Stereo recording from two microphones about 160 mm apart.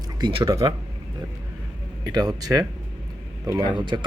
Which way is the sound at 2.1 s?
25° right (ahead or behind).